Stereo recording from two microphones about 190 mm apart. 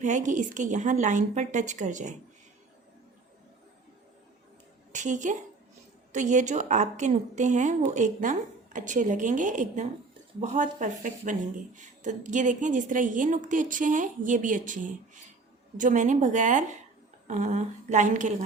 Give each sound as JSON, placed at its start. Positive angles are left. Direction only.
{"t": 0.0, "sound": "a woman's voice", "side_deg": -40}
{"t": 4.9, "sound": "a woman's voice", "side_deg": -40}